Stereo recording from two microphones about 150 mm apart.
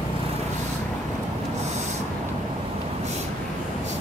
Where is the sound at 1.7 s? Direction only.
50° right (ahead or behind).